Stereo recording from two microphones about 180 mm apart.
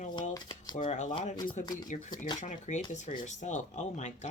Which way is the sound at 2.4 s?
40° left (ahead or behind).